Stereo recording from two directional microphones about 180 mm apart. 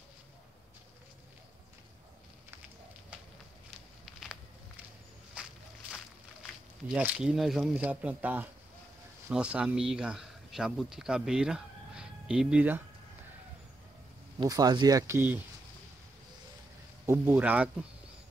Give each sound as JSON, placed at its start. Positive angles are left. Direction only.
{"t": 4.0, "sound": "a sound", "side_deg": 0}
{"t": 6.9, "sound": "speech", "side_deg": -5}
{"t": 14.4, "sound": "speech", "side_deg": -20}
{"t": 17.0, "sound": "speech", "side_deg": -10}